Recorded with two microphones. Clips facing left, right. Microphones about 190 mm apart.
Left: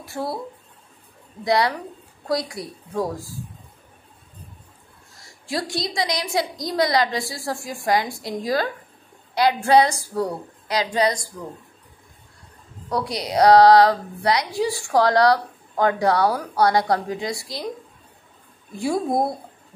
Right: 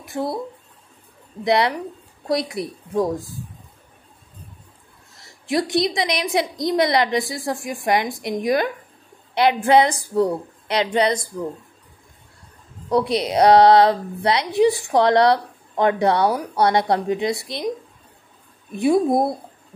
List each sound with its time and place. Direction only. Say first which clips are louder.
0.0 s speech: right 3 dB; 15° right (ahead or behind)
1.4 s a woman's voice: right 2 dB; 25° right (ahead or behind)
5.5 s a woman's voice: right 7 dB; 20° right (ahead or behind)
12.9 s a woman's voice: right 5 dB; 25° right (ahead or behind)